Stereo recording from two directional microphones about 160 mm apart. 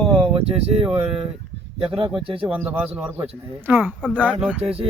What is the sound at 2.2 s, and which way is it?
Speech, 35° right (ahead or behind).